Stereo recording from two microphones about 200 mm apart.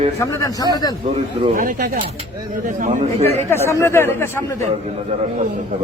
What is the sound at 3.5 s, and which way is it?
Speech, 10° left (ahead or behind).